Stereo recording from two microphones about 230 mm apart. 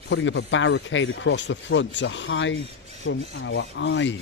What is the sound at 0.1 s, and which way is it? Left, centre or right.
Speech, left.